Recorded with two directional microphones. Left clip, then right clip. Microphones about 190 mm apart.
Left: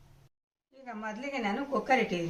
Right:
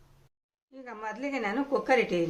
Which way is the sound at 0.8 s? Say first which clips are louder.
Right 2 dB; 50° right (ahead or behind).